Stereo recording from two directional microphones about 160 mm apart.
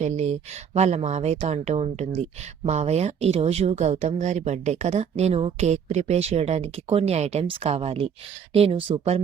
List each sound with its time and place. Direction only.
0.0 s speech: 45° right (ahead or behind)